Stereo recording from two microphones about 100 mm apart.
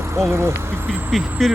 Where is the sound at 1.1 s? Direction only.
Centre (ahead or behind).